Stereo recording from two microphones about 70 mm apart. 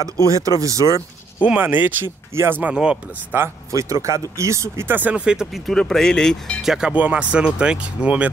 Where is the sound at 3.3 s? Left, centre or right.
Right.